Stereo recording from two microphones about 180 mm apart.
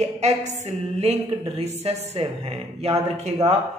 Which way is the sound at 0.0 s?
40° right (ahead or behind).